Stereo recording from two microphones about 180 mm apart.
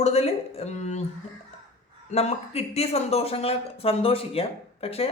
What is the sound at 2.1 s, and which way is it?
A man's voice, 35° left (ahead or behind).